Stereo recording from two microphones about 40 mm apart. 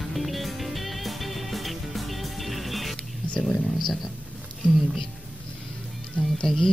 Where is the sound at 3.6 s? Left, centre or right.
Centre.